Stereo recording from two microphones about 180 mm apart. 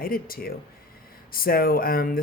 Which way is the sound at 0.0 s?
55° left (ahead or behind).